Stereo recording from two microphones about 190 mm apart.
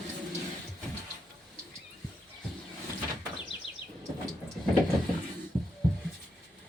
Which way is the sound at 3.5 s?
70° left (ahead or behind).